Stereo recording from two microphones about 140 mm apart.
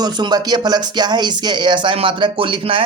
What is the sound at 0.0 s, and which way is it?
Speech, 30° right (ahead or behind).